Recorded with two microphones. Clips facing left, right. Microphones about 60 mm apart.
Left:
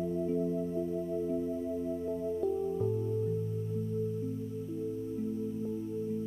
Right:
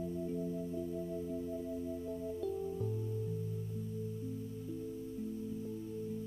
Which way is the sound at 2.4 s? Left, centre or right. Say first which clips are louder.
Left 7 dB; left.